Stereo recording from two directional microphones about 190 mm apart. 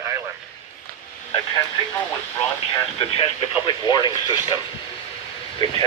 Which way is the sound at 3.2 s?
25° left (ahead or behind).